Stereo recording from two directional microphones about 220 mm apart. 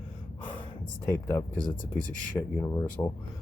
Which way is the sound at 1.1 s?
10° left (ahead or behind).